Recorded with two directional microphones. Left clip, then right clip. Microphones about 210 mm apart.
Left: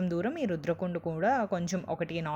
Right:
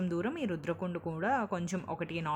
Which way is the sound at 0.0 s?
10° left (ahead or behind).